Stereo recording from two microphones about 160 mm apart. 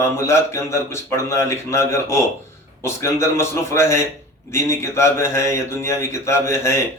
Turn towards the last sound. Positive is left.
turn(degrees=15)  # may be behind; listen again after turning